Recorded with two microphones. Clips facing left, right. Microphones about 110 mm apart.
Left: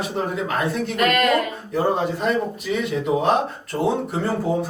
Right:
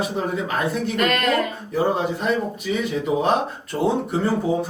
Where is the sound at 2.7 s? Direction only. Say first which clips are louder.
Left 1 dB; centre (ahead or behind).